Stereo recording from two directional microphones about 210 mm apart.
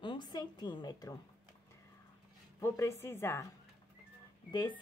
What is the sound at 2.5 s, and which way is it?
Speech, 15° left (ahead or behind).